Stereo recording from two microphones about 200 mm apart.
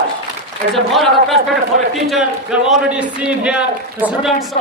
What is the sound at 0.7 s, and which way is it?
A man's voice, centre (ahead or behind).